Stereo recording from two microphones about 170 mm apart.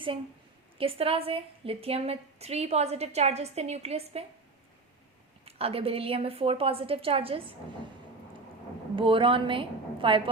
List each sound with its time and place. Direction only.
0.8 s a woman's voice: 35° right (ahead or behind)
5.5 s a woman's voice: 35° right (ahead or behind)
9.0 s a woman's voice: 30° right (ahead or behind)